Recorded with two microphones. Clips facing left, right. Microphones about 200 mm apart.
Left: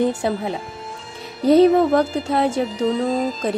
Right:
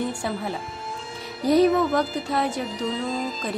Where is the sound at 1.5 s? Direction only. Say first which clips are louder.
Left 5 dB; 30° left (ahead or behind).